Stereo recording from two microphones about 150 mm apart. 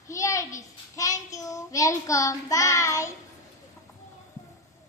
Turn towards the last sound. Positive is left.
turn(degrees=20)  # may be behind; listen again after turning